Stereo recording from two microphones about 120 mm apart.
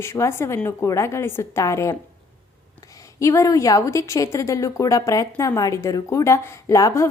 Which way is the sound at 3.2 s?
25° left (ahead or behind).